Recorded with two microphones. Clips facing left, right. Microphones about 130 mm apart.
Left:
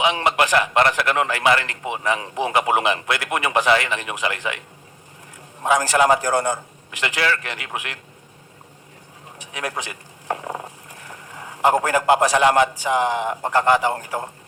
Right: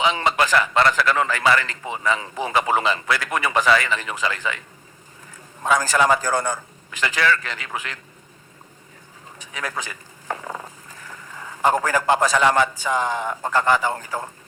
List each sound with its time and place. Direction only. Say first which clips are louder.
0.0 s a man's voice: left 1 dB; 15° left (ahead or behind)
5.6 s a man's voice: left 2 dB; 20° left (ahead or behind)
9.4 s a man's voice: left 2 dB; 15° left (ahead or behind)
10.3 s a sound: left 3 dB; 15° left (ahead or behind)
11.1 s a man's voice: left 1 dB; 15° left (ahead or behind)